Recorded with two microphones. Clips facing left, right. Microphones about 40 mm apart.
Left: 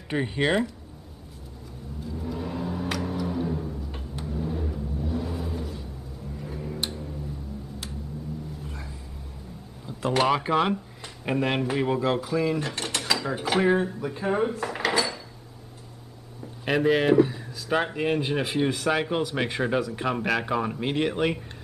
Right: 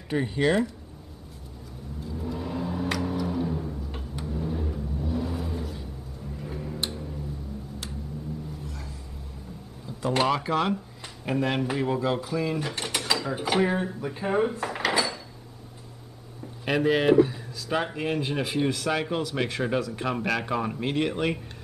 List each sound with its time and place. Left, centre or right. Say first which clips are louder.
0.1 s speech: right 1 dB; centre
2.1 s vehicle: even; centre
6.8 s tick-tock: even; centre
8.6 s dog: left 1 dB; centre
10.1 s speech: left 2 dB; centre
11.7 s mechanisms: left 2 dB; centre
13.5 s speech: left 3 dB; centre
16.6 s speech: even; centre